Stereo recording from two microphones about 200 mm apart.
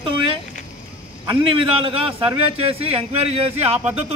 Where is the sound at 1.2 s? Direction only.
25° right (ahead or behind).